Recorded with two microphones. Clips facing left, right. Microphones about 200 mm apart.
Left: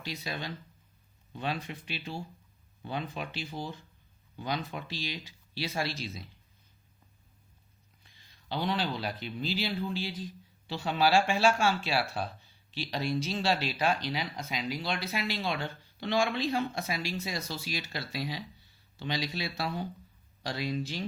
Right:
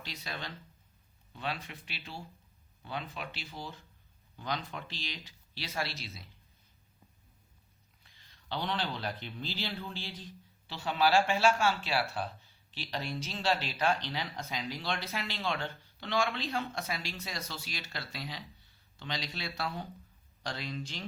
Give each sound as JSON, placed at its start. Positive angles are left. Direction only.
{"t": 0.1, "sound": "speech", "side_deg": 10}
{"t": 8.0, "sound": "a man's voice", "side_deg": 10}